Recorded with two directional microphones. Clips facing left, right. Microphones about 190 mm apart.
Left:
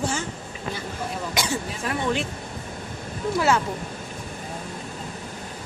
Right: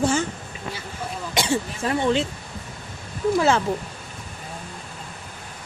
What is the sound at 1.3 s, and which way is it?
Speech, 25° right (ahead or behind).